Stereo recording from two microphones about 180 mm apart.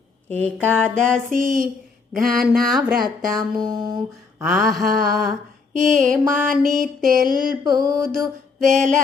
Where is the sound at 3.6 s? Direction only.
20° right (ahead or behind).